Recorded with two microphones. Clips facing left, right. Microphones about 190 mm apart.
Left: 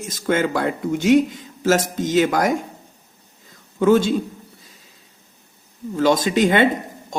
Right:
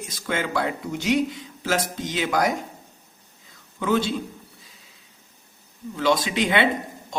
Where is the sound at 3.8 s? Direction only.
45° left (ahead or behind).